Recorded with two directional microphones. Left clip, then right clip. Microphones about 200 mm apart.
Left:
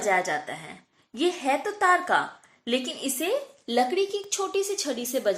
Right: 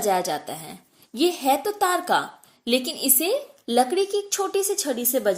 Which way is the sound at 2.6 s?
65° right (ahead or behind).